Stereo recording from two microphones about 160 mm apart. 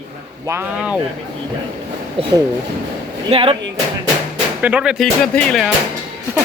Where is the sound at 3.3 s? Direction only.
35° right (ahead or behind).